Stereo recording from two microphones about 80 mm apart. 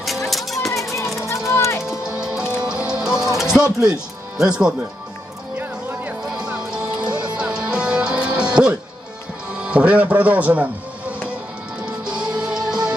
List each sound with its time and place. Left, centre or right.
0.0 s music: centre
1.5 s music: left
1.9 s music: centre
3.5 s speech: centre
5.6 s music: right
6.3 s music: centre
9.6 s speech: centre
12.0 s music: centre